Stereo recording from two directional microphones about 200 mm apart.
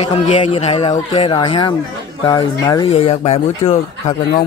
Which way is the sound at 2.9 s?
30° left (ahead or behind).